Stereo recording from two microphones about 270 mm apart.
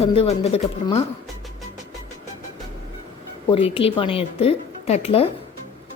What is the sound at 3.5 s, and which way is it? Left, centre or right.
A woman's voice, centre.